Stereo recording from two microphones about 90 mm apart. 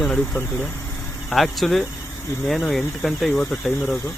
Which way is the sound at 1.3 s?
Centre (ahead or behind).